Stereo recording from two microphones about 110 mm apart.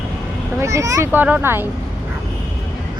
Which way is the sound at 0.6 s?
30° right (ahead or behind).